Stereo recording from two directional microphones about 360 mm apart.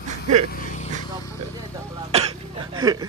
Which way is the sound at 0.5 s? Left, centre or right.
Left.